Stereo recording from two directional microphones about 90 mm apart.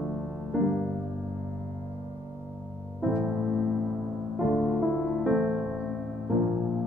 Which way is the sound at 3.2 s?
5° left (ahead or behind).